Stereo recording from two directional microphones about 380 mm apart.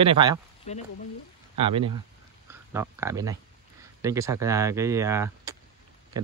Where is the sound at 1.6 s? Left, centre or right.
Centre.